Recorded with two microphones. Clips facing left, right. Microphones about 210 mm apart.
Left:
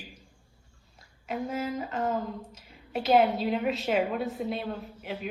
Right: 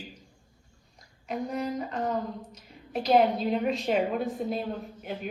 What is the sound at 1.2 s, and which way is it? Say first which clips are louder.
A woman's voice: right 1 dB; 5° left (ahead or behind).